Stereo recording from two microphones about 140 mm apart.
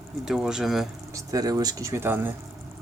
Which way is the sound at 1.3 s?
25° right (ahead or behind).